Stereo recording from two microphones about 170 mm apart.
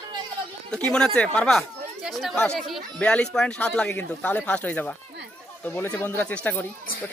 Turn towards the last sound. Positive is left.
turn(degrees=10)  # may be behind; listen again after turning